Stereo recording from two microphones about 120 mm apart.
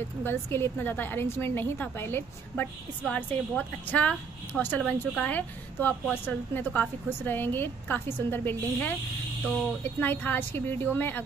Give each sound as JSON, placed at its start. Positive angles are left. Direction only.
{"t": 0.2, "sound": "a woman's voice", "side_deg": 20}